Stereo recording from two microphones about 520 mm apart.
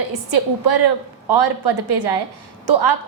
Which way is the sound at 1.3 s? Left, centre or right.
Right.